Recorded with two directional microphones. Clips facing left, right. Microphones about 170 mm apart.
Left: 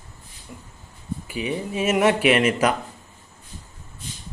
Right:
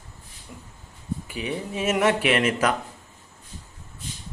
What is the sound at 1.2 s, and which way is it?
Speech, 10° left (ahead or behind).